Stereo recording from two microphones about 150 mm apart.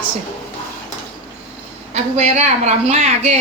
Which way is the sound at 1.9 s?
50° right (ahead or behind).